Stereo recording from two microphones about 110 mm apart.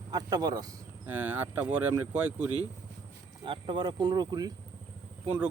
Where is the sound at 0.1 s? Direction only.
35° right (ahead or behind).